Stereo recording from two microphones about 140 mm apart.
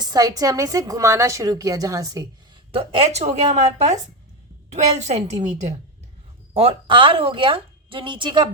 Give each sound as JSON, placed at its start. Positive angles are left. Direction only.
{"t": 0.0, "sound": "a woman's voice", "side_deg": -25}
{"t": 2.7, "sound": "a woman's voice", "side_deg": -40}